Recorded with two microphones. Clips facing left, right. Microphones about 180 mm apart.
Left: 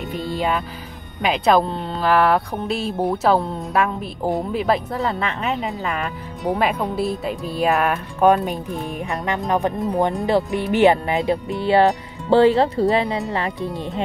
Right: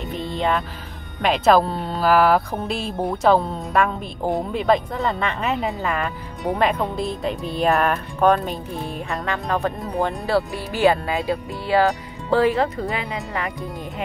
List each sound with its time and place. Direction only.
0.1 s music: centre (ahead or behind)
1.2 s speech: centre (ahead or behind); by 13.2 s 30° left (ahead or behind)